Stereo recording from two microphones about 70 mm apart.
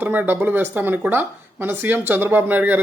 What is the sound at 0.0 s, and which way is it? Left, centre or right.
Speech, right.